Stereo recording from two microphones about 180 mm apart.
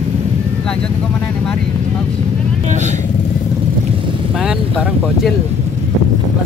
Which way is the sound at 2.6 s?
40° right (ahead or behind).